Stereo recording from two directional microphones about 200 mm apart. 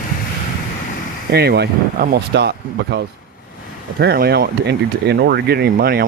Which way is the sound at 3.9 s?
50° right (ahead or behind).